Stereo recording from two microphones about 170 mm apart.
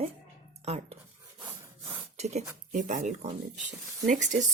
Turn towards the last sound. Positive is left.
turn(degrees=-45)  # may be behind; listen again after turning